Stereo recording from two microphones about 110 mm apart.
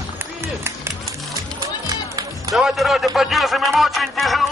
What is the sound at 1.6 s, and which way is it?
Music, 35° right (ahead or behind).